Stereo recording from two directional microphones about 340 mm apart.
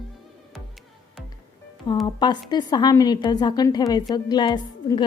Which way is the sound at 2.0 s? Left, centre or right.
Centre.